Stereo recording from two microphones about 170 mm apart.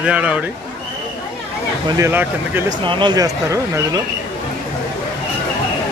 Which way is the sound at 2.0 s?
10° right (ahead or behind).